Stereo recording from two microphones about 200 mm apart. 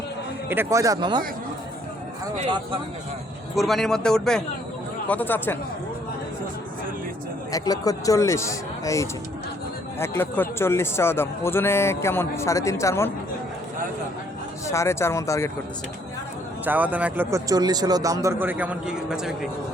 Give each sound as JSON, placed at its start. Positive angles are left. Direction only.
{"t": 0.4, "sound": "speech", "side_deg": -10}
{"t": 3.5, "sound": "a man's voice", "side_deg": 0}
{"t": 7.5, "sound": "a man's voice", "side_deg": 15}
{"t": 14.7, "sound": "a man's voice", "side_deg": 15}
{"t": 16.6, "sound": "speech", "side_deg": -10}